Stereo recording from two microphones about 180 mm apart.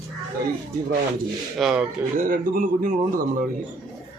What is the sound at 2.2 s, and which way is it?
Speech, 50° right (ahead or behind).